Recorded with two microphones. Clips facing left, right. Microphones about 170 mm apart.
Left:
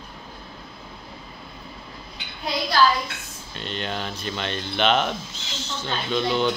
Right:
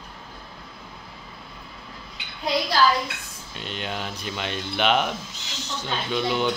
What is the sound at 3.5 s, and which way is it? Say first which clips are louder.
Speech: left 2 dB; 10° right (ahead or behind).